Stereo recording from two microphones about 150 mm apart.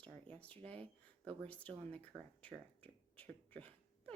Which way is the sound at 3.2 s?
10° left (ahead or behind).